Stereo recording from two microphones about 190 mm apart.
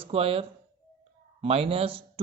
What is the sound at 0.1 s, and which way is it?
A man's voice, 30° right (ahead or behind).